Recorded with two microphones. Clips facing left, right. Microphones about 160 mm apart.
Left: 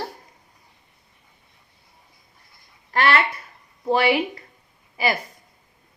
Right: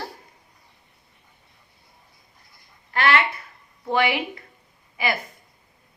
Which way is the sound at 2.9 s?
40° left (ahead or behind).